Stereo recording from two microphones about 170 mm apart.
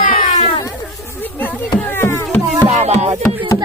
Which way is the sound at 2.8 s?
40° right (ahead or behind).